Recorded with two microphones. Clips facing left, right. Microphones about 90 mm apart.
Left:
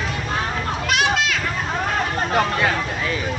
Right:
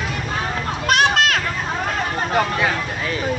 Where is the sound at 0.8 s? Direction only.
45° right (ahead or behind).